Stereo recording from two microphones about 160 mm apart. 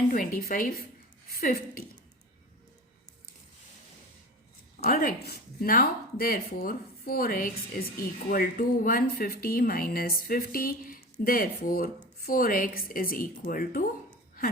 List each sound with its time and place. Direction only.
0.1 s a woman's voice: 60° left (ahead or behind)
4.8 s a woman's voice: 70° left (ahead or behind)